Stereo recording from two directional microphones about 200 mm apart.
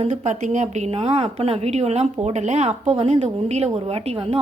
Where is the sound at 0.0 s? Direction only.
35° right (ahead or behind).